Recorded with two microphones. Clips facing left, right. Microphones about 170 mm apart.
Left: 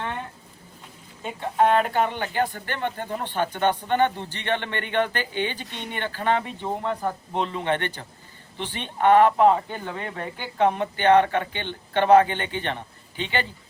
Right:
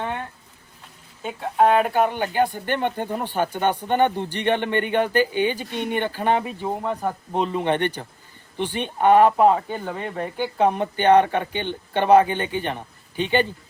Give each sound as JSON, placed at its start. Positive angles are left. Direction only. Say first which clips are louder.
{"t": 1.2, "sound": "speech", "louder": "right 2 dB", "side_deg": 0}
{"t": 5.7, "sound": "speech", "louder": "right 9 dB", "side_deg": -50}
{"t": 6.0, "sound": "speech", "louder": "right 1 dB", "side_deg": -15}